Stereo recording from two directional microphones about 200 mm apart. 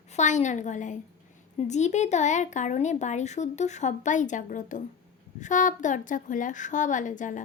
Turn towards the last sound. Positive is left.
turn(degrees=40)  # may be behind; listen again after turning